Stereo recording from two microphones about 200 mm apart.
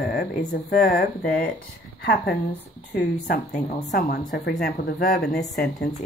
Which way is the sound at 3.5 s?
40° left (ahead or behind).